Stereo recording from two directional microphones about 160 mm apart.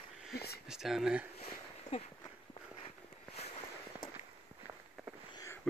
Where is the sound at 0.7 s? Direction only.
5° right (ahead or behind).